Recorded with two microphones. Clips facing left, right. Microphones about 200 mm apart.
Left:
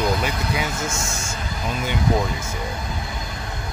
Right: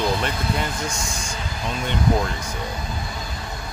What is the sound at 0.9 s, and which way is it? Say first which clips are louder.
Speech: left 1 dB; 25° left (ahead or behind).